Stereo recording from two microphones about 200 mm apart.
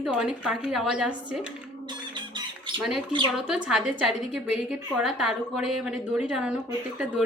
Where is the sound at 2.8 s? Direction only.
Centre (ahead or behind).